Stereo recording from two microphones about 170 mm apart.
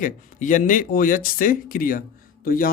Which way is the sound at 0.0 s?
50° left (ahead or behind).